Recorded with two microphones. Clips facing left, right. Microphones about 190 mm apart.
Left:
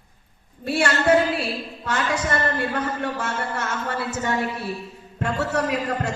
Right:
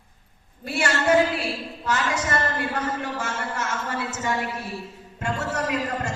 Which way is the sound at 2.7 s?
60° left (ahead or behind).